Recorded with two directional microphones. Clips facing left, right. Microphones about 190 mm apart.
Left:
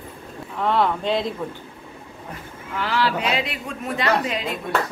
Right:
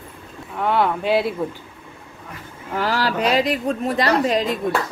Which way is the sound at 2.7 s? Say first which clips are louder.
Right 2 dB; 40° right (ahead or behind).